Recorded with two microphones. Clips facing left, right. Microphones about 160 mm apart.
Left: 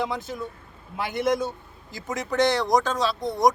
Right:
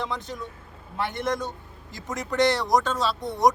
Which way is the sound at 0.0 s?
5° left (ahead or behind).